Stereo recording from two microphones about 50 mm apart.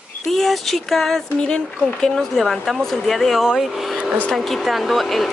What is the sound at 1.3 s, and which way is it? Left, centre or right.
Speech, centre.